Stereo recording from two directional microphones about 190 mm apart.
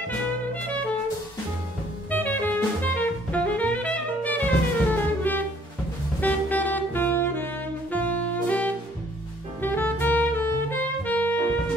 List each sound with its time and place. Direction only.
2.0 s music: 10° left (ahead or behind)
6.2 s saxophone: 10° left (ahead or behind)